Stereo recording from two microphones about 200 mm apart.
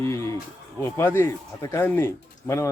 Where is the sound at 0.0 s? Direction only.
15° left (ahead or behind).